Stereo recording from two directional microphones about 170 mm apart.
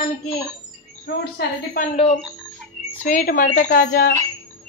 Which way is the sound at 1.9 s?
35° left (ahead or behind).